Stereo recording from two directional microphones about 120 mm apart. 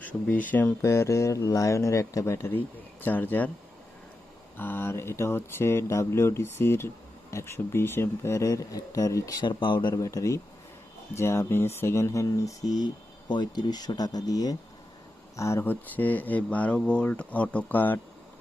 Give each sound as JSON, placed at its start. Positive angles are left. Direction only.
{"t": 0.0, "sound": "speech", "side_deg": 10}
{"t": 4.5, "sound": "speech", "side_deg": 15}
{"t": 10.0, "sound": "speech", "side_deg": 25}